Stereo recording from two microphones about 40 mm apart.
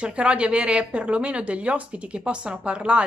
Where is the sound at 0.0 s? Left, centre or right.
Right.